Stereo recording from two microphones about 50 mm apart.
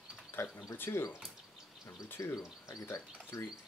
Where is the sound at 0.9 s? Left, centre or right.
Left.